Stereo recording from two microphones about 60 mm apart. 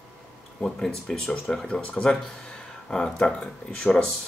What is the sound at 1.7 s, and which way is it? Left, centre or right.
Speech, centre.